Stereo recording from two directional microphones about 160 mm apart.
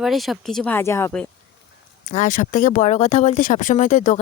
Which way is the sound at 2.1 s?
50° left (ahead or behind).